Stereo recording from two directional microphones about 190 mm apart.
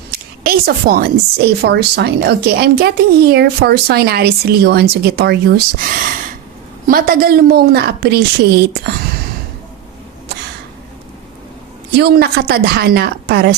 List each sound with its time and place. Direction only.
0.1 s a woman's voice: 55° right (ahead or behind)
11.9 s a woman's voice: 60° right (ahead or behind)